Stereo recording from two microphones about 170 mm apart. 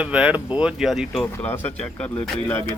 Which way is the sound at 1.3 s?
10° left (ahead or behind).